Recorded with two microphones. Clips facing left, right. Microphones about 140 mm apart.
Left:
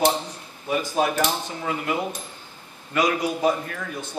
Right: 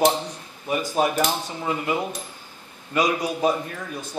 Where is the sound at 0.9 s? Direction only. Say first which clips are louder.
Right 1 dB; 15° right (ahead or behind).